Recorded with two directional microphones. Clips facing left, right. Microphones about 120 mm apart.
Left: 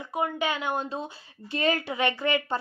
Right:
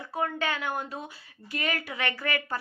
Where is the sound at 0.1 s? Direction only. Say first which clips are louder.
Left 2 dB; 15° left (ahead or behind).